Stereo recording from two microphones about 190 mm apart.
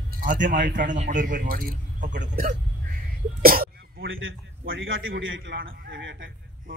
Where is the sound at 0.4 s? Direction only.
65° right (ahead or behind).